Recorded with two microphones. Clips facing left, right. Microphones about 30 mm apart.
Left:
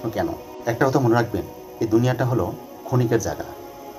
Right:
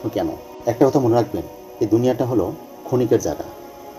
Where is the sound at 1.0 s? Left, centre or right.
Left.